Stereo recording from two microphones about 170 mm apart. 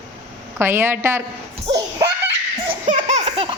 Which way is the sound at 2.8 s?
45° right (ahead or behind).